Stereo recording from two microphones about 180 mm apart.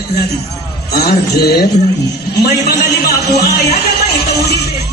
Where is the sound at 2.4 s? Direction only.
60° left (ahead or behind).